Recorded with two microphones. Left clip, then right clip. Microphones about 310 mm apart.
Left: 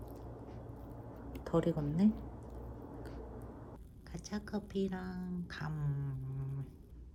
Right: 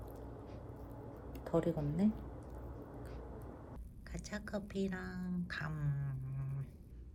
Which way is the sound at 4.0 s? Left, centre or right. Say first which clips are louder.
Left 1 dB; centre.